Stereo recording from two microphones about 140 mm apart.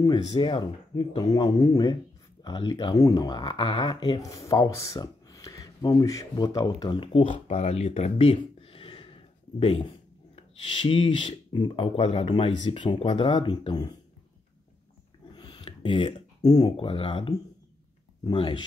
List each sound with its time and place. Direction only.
0.0 s speech: 30° left (ahead or behind)
7.1 s speech: 45° left (ahead or behind)
7.5 s a sound: 50° left (ahead or behind)
10.3 s speech: 40° left (ahead or behind)
15.3 s a sound: 35° left (ahead or behind)
16.7 s speech: 40° left (ahead or behind)